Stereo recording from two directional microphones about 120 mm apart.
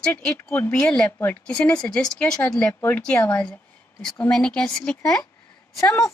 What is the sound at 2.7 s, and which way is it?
Speech, 20° left (ahead or behind).